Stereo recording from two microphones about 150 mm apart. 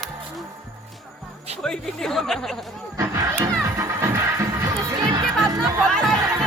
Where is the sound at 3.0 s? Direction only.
20° right (ahead or behind).